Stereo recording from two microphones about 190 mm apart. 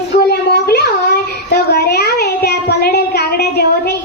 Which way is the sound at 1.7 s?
55° left (ahead or behind).